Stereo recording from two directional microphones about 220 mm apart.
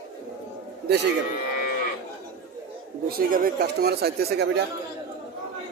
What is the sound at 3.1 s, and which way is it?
Speech, 40° right (ahead or behind).